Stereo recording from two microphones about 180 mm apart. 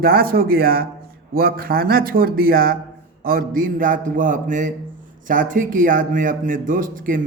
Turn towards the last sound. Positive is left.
turn(degrees=-50)  # may be behind; listen again after turning